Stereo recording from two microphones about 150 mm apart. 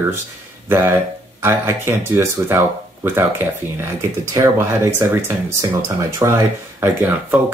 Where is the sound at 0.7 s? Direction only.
15° right (ahead or behind).